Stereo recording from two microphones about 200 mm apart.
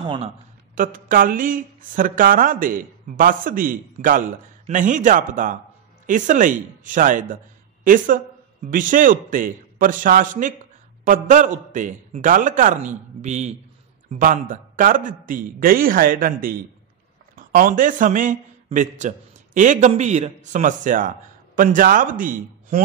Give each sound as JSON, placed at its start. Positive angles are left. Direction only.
{"t": 0.0, "sound": "a man's voice", "side_deg": -25}
{"t": 0.7, "sound": "a man's voice", "side_deg": -40}